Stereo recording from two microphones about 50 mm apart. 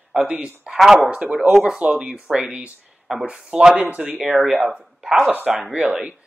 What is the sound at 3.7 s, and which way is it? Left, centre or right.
Speech, right.